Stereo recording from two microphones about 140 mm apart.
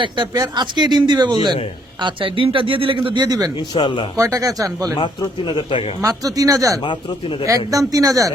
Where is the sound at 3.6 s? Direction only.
35° left (ahead or behind).